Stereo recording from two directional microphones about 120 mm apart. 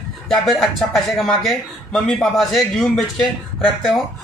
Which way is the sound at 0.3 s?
Centre (ahead or behind).